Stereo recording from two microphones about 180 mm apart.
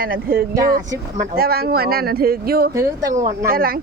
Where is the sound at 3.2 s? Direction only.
55° right (ahead or behind).